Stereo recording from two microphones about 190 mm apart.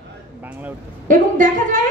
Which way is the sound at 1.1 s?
45° right (ahead or behind).